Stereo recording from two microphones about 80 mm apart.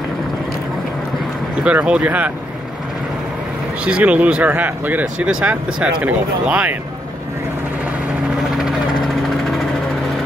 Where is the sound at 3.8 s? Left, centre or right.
Centre.